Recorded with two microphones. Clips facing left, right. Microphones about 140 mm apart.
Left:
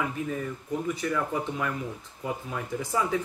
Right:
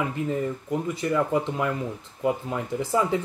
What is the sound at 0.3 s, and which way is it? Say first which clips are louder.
Speech: right 5 dB; 25° right (ahead or behind).